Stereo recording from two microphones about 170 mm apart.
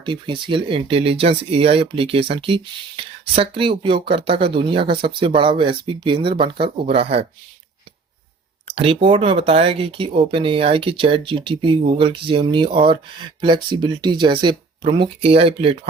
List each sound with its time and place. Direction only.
0.0 s speech: 30° right (ahead or behind)
8.6 s speech: 35° right (ahead or behind)